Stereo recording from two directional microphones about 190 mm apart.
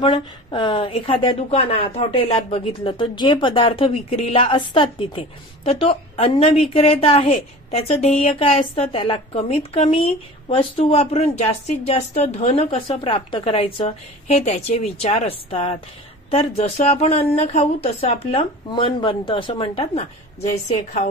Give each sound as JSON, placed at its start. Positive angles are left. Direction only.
{"t": 0.0, "sound": "a woman's voice", "side_deg": 25}